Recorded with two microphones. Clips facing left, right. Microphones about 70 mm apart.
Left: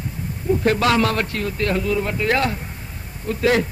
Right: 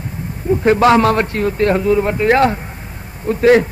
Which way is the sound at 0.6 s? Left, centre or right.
Right.